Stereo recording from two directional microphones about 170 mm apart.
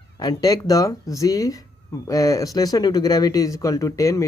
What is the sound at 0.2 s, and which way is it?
Speech, 25° left (ahead or behind).